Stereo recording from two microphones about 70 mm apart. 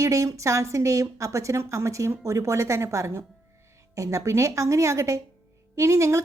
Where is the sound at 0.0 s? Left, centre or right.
Right.